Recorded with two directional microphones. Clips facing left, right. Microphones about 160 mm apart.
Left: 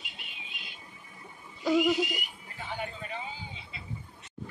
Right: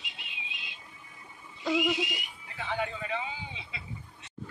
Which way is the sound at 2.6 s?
90° right.